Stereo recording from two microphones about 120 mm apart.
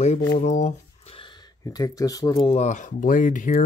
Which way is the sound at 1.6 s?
30° left (ahead or behind).